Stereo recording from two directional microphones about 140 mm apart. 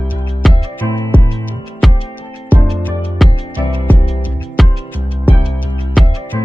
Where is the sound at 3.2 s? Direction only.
Centre (ahead or behind).